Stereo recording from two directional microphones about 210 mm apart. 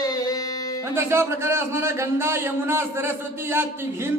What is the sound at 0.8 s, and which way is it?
A man's voice, 10° right (ahead or behind).